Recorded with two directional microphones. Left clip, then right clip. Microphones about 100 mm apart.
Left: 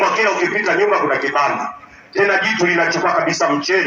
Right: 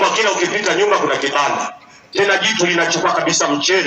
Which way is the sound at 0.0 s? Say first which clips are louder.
Even; 35° right (ahead or behind).